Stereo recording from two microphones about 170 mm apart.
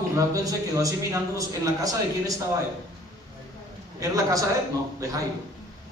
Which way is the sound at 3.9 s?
20° right (ahead or behind).